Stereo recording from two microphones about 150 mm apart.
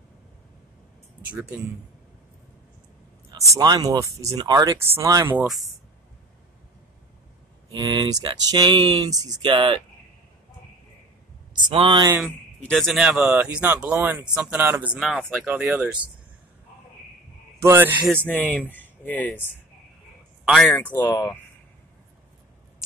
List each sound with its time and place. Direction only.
1.3 s speech: 10° right (ahead or behind)
3.3 s speech: 20° right (ahead or behind)
7.7 s speech: 30° right (ahead or behind)
11.5 s speech: 35° right (ahead or behind)
12.3 s speech: 5° left (ahead or behind); by 14.9 s 10° right (ahead or behind)
15.0 s speech: centre (ahead or behind)
15.2 s speech: 10° right (ahead or behind)
17.6 s speech: 15° right (ahead or behind)
18.0 s speech: 10° left (ahead or behind)
20.4 s speech: centre (ahead or behind)
20.7 s speech: 15° left (ahead or behind)